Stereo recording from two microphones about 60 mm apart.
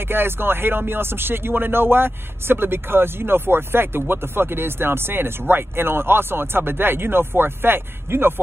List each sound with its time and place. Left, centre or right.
0.0 s speech: right